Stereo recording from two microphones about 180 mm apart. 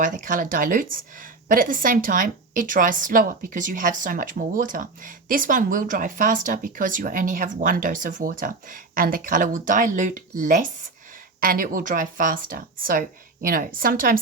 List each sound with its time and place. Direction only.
0.0 s a woman's voice: 45° right (ahead or behind)